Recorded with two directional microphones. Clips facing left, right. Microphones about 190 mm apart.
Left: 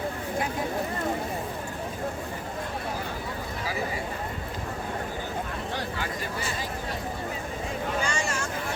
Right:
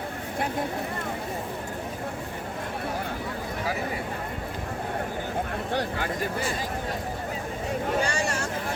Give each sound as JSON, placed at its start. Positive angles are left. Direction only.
{"t": 8.0, "sound": "vehicle", "side_deg": -35}